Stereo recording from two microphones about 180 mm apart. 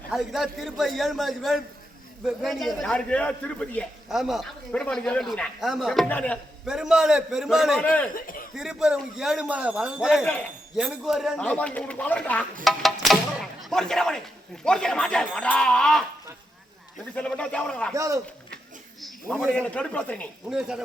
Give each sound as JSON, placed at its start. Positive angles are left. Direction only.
{"t": 0.1, "sound": "a man's voice", "side_deg": 0}
{"t": 6.7, "sound": "a man's voice", "side_deg": -5}
{"t": 8.1, "sound": "speech", "side_deg": 50}
{"t": 8.5, "sound": "a man's voice", "side_deg": -5}
{"t": 17.2, "sound": "a man's voice", "side_deg": 5}
{"t": 17.9, "sound": "speech", "side_deg": -15}
{"t": 19.0, "sound": "a man's voice", "side_deg": 5}
{"t": 20.5, "sound": "a man's voice", "side_deg": -5}